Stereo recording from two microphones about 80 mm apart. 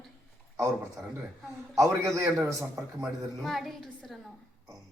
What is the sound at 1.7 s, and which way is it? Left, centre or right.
Speech, right.